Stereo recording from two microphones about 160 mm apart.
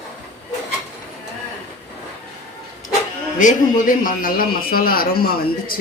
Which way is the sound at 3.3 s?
55° left (ahead or behind).